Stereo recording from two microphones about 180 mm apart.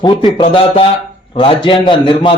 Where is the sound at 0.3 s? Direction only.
30° left (ahead or behind).